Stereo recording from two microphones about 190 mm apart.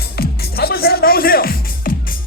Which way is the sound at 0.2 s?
55° left (ahead or behind).